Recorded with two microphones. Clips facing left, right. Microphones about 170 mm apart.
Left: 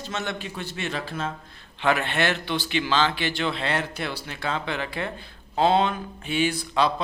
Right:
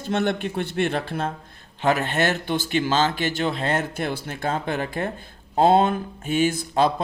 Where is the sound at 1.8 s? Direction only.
40° right (ahead or behind).